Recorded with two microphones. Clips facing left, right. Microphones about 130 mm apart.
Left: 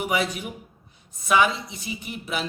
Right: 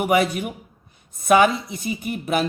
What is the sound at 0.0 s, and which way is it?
A man's voice, 55° right (ahead or behind).